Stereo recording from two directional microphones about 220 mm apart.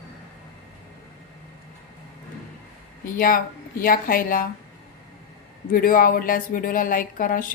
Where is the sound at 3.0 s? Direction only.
40° left (ahead or behind).